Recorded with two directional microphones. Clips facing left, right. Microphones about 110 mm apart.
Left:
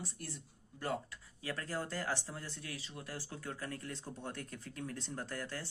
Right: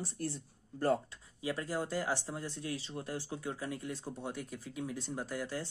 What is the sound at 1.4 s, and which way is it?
Speech, 15° right (ahead or behind).